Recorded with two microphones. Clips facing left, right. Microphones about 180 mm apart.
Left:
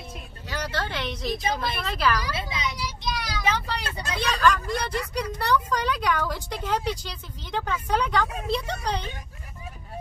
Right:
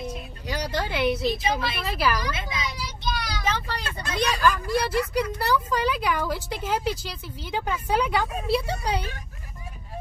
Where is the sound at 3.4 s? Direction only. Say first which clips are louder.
Left 1 dB; 10° left (ahead or behind).